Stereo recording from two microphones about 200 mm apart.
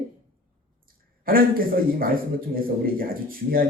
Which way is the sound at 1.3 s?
45° right (ahead or behind).